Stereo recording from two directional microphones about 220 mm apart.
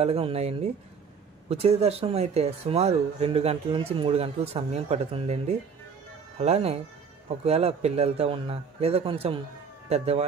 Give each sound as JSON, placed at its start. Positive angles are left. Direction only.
{"t": 0.0, "sound": "speech", "side_deg": -25}